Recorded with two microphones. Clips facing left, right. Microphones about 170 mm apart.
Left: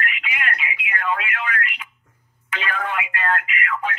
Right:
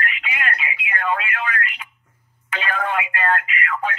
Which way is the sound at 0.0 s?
35° right (ahead or behind).